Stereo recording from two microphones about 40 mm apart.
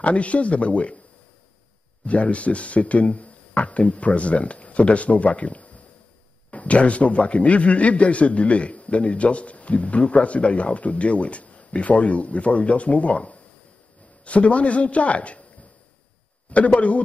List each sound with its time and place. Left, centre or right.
0.0 s a man's voice: left
2.0 s a man's voice: left
16.4 s a man's voice: left